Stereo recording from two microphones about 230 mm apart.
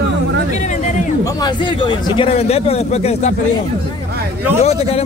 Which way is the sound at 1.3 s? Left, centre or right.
Centre.